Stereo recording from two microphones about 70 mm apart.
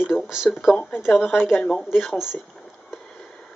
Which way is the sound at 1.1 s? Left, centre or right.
Left.